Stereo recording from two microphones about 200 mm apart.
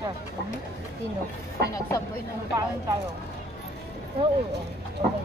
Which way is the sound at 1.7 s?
15° left (ahead or behind).